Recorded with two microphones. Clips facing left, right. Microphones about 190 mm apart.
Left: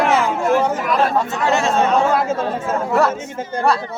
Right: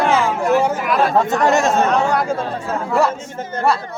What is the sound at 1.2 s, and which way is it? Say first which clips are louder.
Speech: right 3 dB; 45° right (ahead or behind).